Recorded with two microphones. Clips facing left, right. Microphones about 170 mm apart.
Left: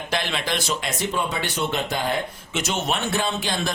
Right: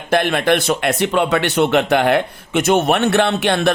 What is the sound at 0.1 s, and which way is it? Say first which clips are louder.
Speech: right 12 dB; 55° right (ahead or behind).